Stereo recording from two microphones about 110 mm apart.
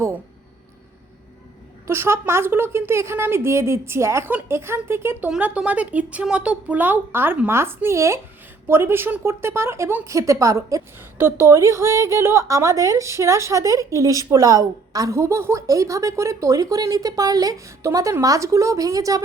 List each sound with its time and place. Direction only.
1.9 s speech: 25° right (ahead or behind)
5.3 s speech: 10° right (ahead or behind); by 19.2 s 30° right (ahead or behind)